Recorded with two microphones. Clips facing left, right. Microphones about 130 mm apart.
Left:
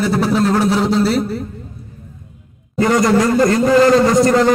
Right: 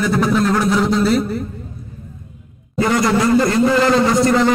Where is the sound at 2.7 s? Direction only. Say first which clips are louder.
Left 3 dB; 45° left (ahead or behind).